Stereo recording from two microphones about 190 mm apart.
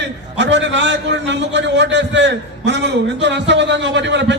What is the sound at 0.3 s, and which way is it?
A man's voice, 70° right (ahead or behind).